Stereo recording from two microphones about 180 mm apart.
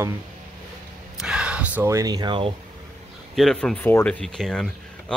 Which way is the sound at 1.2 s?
5° right (ahead or behind).